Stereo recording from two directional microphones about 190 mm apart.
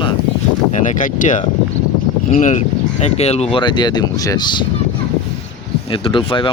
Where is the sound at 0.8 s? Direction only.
45° left (ahead or behind); by 4.6 s 20° left (ahead or behind).